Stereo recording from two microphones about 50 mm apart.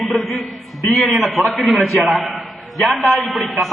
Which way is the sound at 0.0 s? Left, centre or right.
Centre.